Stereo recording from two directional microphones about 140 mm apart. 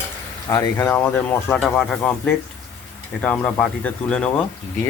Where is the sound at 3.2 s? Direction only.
10° left (ahead or behind).